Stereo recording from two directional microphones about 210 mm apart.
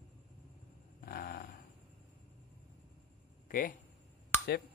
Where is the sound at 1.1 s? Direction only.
45° left (ahead or behind).